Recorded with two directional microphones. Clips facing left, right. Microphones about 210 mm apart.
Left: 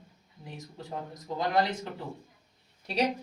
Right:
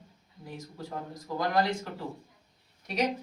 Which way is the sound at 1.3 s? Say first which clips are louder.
Even; 20° left (ahead or behind).